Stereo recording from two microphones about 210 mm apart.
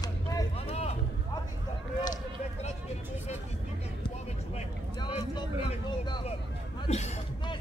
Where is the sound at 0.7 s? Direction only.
30° left (ahead or behind).